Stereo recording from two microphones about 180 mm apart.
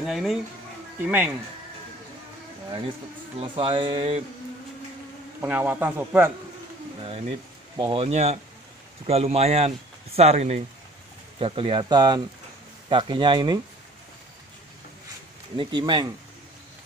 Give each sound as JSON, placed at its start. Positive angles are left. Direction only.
{"t": 0.0, "sound": "a man's voice", "side_deg": 0}
{"t": 3.3, "sound": "speech", "side_deg": -30}
{"t": 5.4, "sound": "a man's voice", "side_deg": -10}
{"t": 7.0, "sound": "speech", "side_deg": -30}
{"t": 15.5, "sound": "speech", "side_deg": -25}